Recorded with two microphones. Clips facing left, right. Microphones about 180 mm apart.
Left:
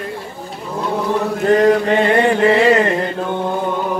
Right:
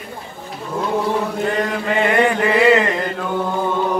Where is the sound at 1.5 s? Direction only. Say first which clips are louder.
Left 13 dB; 40° left (ahead or behind).